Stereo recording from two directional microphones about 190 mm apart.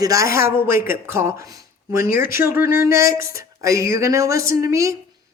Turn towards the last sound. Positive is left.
turn(degrees=-15)  # may be behind; listen again after turning